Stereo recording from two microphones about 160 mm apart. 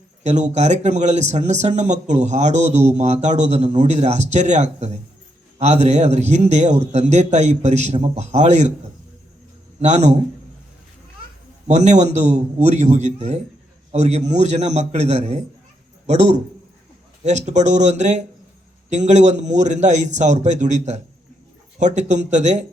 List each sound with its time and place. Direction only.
0.2 s speech: 45° right (ahead or behind)
9.8 s speech: 45° right (ahead or behind)
11.7 s speech: 45° right (ahead or behind)